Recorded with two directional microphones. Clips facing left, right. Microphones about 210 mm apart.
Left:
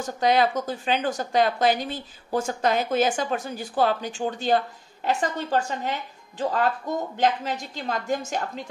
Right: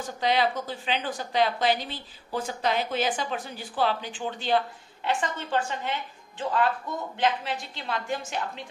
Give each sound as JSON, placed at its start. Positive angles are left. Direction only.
{"t": 0.2, "sound": "a woman's voice", "side_deg": 45}